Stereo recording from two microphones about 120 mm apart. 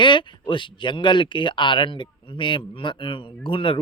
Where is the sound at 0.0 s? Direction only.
40° left (ahead or behind).